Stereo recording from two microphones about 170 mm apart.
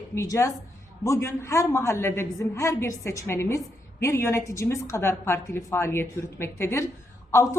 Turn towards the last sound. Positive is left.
turn(degrees=15)  # may be behind; listen again after turning